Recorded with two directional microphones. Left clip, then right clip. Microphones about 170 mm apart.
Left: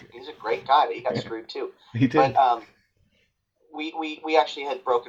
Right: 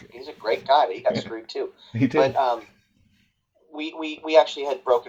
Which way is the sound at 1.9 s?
45° right (ahead or behind).